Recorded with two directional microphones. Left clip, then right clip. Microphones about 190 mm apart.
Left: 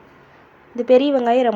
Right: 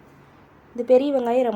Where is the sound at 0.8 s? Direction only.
20° left (ahead or behind).